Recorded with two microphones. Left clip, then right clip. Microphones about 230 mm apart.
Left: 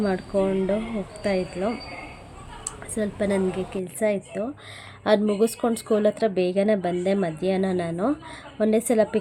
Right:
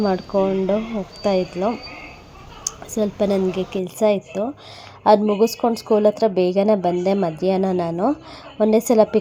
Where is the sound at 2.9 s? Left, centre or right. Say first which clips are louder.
Right 5 dB; centre.